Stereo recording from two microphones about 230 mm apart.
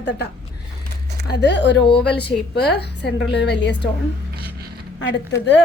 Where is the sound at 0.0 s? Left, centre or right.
Left.